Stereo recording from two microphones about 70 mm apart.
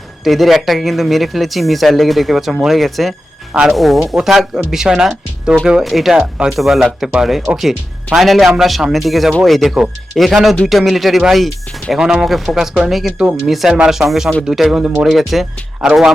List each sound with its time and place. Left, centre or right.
0.3 s speech: centre
3.5 s speech: centre
3.8 s speech: centre
6.1 s speech: centre